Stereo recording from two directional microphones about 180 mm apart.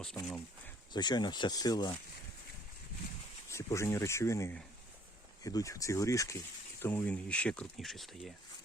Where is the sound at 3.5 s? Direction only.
15° left (ahead or behind); by 8.3 s centre (ahead or behind).